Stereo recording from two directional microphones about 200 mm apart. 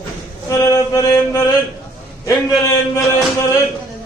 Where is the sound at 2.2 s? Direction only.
15° left (ahead or behind).